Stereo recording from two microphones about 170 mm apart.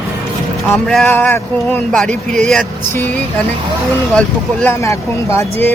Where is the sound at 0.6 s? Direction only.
5° left (ahead or behind).